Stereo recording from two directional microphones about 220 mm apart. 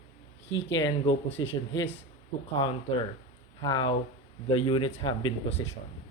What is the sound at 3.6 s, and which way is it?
Speech, 20° left (ahead or behind).